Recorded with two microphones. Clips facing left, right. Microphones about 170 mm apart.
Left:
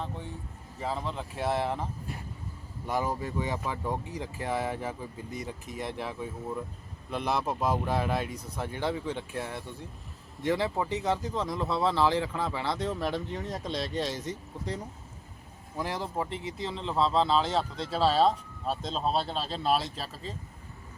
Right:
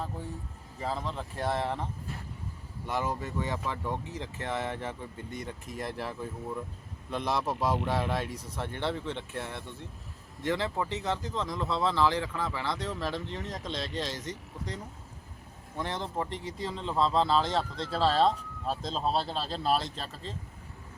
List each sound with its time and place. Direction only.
0.8 s speech: centre (ahead or behind)
15.8 s speech: 5° left (ahead or behind)